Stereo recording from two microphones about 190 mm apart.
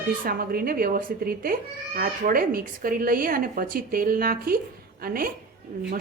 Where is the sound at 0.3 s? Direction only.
50° right (ahead or behind).